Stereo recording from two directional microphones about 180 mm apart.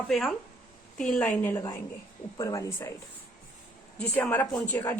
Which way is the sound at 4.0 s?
10° left (ahead or behind).